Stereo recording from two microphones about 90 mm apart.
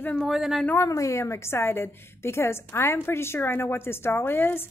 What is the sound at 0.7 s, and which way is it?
A woman's voice, 35° left (ahead or behind).